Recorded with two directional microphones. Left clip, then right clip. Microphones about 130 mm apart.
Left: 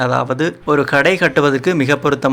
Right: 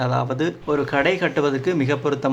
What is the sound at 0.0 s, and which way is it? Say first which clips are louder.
A man's voice: left 6 dB; 30° left (ahead or behind).